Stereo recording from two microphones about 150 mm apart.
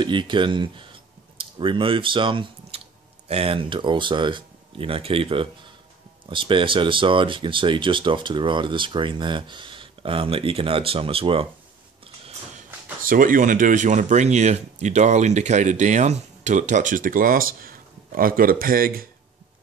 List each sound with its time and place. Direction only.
0.0 s speech: 30° right (ahead or behind)
13.0 s speech: 70° right (ahead or behind)